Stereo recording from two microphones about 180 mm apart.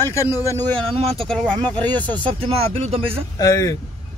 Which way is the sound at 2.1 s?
30° right (ahead or behind).